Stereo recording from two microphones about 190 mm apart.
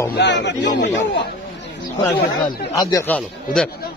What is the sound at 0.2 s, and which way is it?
Speech, 65° left (ahead or behind).